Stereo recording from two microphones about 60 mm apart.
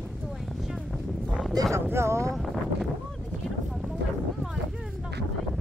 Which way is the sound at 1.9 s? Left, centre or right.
Right.